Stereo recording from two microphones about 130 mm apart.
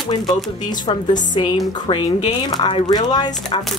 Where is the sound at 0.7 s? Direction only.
35° left (ahead or behind).